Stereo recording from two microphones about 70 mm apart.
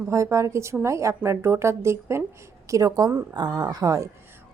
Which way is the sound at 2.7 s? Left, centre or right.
Right.